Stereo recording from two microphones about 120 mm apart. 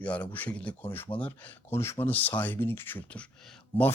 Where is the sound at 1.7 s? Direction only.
20° left (ahead or behind).